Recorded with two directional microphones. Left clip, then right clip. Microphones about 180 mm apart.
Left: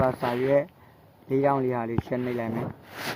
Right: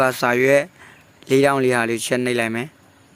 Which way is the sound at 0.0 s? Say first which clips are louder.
Right 8 dB; 55° right (ahead or behind).